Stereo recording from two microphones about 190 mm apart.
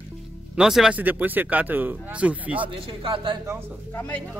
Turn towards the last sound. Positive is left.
turn(degrees=10)  # may be behind; listen again after turning